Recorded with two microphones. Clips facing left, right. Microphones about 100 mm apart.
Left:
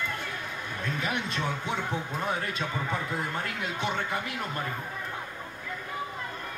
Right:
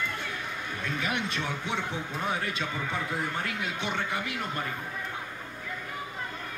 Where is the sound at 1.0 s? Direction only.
40° left (ahead or behind).